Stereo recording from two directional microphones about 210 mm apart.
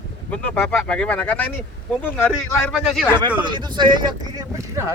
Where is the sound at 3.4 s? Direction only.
20° right (ahead or behind).